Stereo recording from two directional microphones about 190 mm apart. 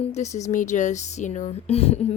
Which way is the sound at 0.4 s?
40° left (ahead or behind).